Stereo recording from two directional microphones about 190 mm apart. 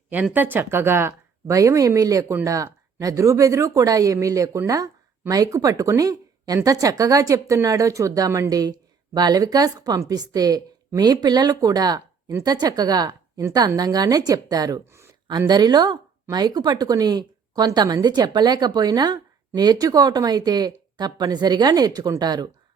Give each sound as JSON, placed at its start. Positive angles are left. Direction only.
{"t": 0.1, "sound": "a woman's voice", "side_deg": -10}